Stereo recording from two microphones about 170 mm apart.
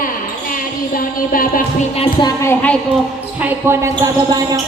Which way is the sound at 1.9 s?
35° left (ahead or behind).